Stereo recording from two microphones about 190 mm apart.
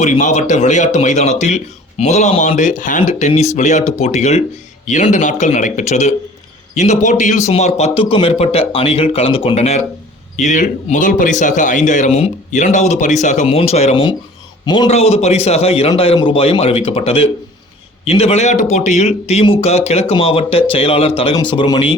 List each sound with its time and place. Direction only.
0.0 s a man's voice: 40° left (ahead or behind)